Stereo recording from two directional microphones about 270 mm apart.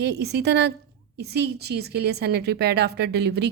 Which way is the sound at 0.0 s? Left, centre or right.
Right.